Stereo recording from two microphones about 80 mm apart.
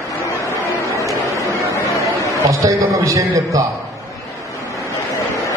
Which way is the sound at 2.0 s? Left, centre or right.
Right.